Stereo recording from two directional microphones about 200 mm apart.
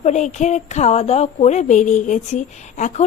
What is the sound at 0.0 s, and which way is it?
A woman's voice, 35° left (ahead or behind).